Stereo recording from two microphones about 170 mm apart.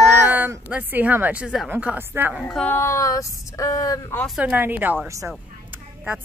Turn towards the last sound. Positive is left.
turn(degrees=-5)  # may be behind; listen again after turning